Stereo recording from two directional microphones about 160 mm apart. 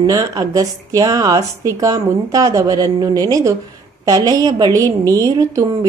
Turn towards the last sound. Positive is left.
turn(degrees=-20)  # may be behind; listen again after turning